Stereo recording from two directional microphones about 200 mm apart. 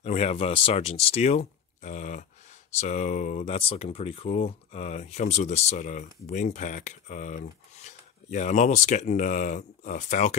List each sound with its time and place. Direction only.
0.0 s speech: 35° left (ahead or behind)